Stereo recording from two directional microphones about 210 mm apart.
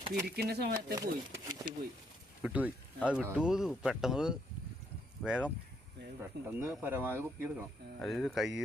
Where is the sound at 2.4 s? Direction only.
5° right (ahead or behind).